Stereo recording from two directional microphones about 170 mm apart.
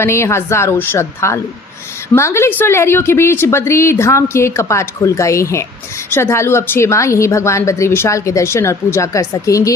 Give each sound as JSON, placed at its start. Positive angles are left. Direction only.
{"t": 0.0, "sound": "a woman's voice", "side_deg": 15}